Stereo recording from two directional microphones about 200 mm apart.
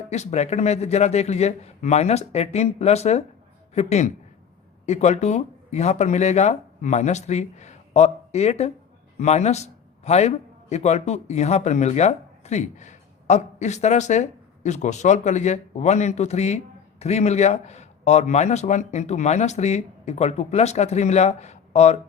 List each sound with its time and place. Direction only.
0.1 s a man's voice: 35° left (ahead or behind)